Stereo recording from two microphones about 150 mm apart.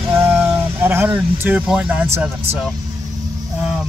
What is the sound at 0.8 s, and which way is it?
Speech, 15° right (ahead or behind).